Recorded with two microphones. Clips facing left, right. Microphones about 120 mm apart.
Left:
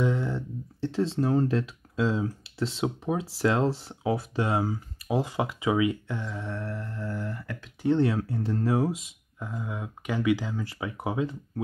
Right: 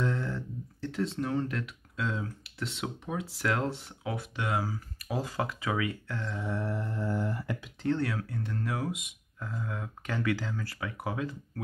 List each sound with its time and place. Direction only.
0.0 s a sound: 15° left (ahead or behind)
0.8 s speech: 30° left (ahead or behind)
6.3 s mantra: 5° right (ahead or behind)
6.6 s mantra: 20° right (ahead or behind)
7.8 s speech: 20° left (ahead or behind)
9.4 s speech: 15° left (ahead or behind)